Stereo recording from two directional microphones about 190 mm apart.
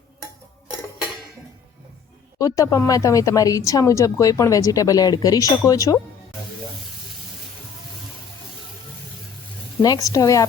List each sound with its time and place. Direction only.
2.4 s a woman's voice: 15° left (ahead or behind)
9.8 s a woman's voice: 20° left (ahead or behind)